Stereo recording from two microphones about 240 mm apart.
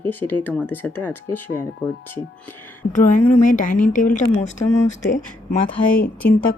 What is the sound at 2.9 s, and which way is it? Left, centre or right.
A woman's voice, left.